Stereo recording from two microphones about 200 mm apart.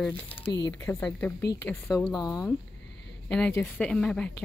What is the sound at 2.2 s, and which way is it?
Speech, 15° left (ahead or behind).